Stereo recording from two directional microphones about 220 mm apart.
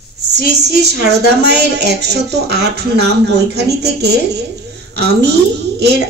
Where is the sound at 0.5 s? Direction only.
50° right (ahead or behind).